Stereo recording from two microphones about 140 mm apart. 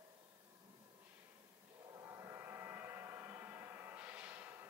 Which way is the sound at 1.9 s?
20° right (ahead or behind).